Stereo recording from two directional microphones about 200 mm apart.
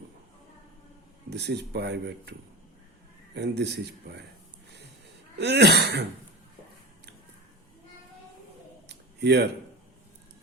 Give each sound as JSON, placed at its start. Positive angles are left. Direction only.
{"t": 1.3, "sound": "speech", "side_deg": -55}
{"t": 3.3, "sound": "speech", "side_deg": -60}
{"t": 5.4, "sound": "speech", "side_deg": -55}
{"t": 8.9, "sound": "a sound", "side_deg": -60}